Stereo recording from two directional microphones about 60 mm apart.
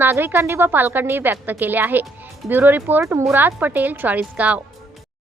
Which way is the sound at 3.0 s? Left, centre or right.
Right.